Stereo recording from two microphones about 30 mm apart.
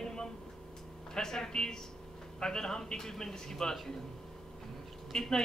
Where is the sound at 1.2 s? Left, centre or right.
Centre.